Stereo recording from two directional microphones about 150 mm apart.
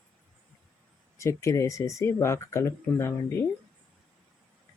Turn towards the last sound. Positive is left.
turn(degrees=15)  # may be behind; listen again after turning